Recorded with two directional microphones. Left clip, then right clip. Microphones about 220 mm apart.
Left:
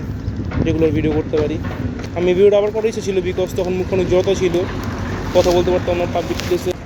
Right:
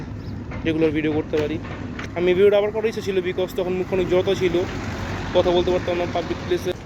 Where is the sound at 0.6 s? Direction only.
Centre (ahead or behind).